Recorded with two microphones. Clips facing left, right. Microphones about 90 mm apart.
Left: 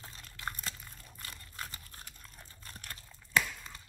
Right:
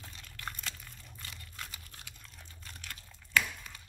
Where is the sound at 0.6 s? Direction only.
40° left (ahead or behind).